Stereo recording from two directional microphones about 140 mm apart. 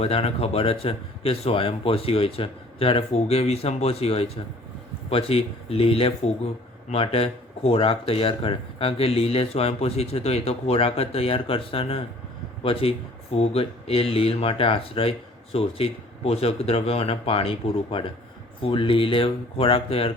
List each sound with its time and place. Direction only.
0.0 s speech: 45° left (ahead or behind)
13.3 s speech: 45° left (ahead or behind)